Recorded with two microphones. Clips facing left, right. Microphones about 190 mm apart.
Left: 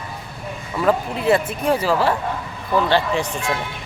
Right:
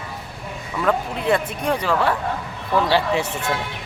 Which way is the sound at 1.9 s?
30° left (ahead or behind).